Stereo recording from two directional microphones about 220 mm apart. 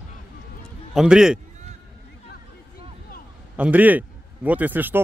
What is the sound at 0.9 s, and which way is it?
Speech, 5° right (ahead or behind).